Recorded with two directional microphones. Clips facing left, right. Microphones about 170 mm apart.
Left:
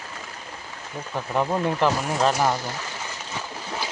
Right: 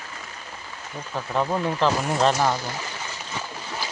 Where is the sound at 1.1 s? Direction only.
10° left (ahead or behind).